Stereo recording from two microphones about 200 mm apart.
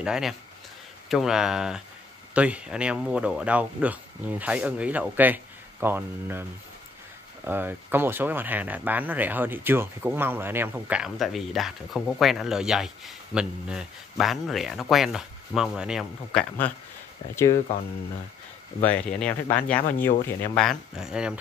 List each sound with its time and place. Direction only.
0.0 s speech: centre (ahead or behind)
7.4 s speech: 10° right (ahead or behind)
16.3 s speech: 5° left (ahead or behind)
18.8 s speech: 5° left (ahead or behind)